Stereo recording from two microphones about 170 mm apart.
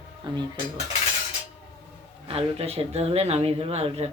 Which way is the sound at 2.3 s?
35° right (ahead or behind).